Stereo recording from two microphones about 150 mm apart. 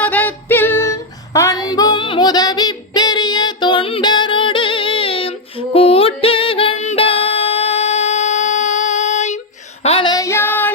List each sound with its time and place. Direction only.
0.0 s female singing: 10° left (ahead or behind); by 9.4 s 50° left (ahead or behind)
9.8 s child singing: 40° left (ahead or behind)
10.1 s child singing: 20° left (ahead or behind)